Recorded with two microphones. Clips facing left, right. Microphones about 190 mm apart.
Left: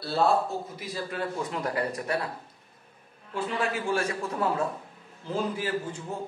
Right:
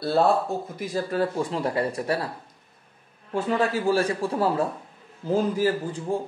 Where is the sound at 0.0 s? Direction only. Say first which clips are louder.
Right 3 dB; 50° right (ahead or behind).